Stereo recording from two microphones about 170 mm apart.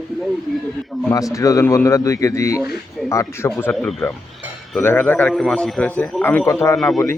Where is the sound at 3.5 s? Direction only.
5° left (ahead or behind).